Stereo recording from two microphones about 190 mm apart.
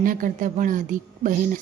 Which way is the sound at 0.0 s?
45° right (ahead or behind).